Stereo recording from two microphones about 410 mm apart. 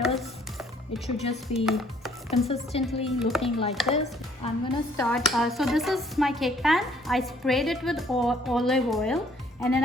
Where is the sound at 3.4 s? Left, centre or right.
Centre.